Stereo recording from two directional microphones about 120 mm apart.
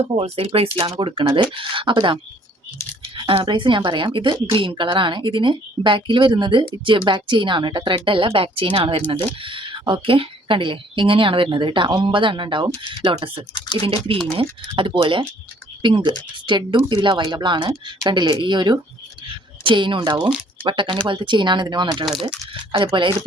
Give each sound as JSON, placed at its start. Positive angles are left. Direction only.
{"t": 0.0, "sound": "a woman's voice", "side_deg": -55}
{"t": 3.4, "sound": "a woman's voice", "side_deg": -40}